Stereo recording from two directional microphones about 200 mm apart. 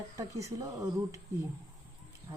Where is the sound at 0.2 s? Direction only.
15° right (ahead or behind).